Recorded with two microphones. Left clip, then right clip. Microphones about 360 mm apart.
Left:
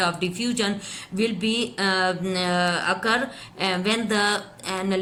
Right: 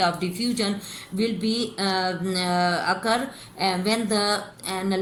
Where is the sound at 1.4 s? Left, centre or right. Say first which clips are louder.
Left 2 dB; left.